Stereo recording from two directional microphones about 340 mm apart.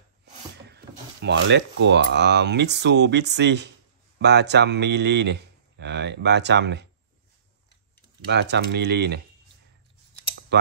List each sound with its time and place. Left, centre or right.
0.7 s speech: right
8.3 s speech: right
10.5 s speech: right